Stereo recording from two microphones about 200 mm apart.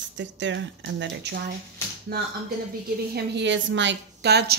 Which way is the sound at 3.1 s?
60° right (ahead or behind).